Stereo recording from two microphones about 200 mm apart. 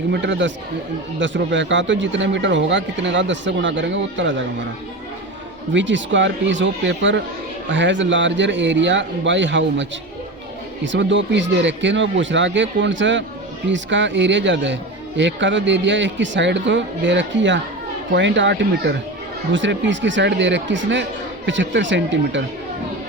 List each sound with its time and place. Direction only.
0.1 s speech: 60° right (ahead or behind)
5.7 s speech: 65° right (ahead or behind)
10.8 s speech: 65° right (ahead or behind)